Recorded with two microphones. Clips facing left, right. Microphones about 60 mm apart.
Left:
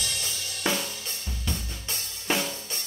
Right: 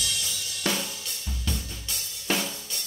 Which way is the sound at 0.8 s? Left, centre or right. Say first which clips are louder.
Left 1 dB; left.